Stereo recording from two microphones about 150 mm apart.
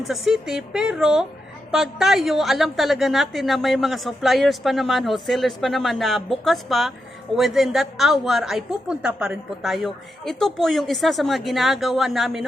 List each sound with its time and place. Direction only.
0.1 s a woman's voice: centre (ahead or behind)